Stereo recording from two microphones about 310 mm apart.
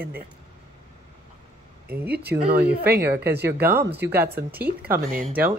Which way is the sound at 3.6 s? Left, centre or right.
Centre.